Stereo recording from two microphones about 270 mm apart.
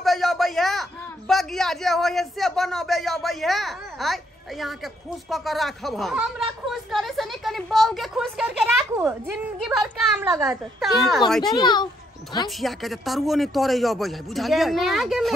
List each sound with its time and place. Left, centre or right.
0.0 s a man's voice: centre
11.6 s a child's voice: centre
12.4 s a man's voice: centre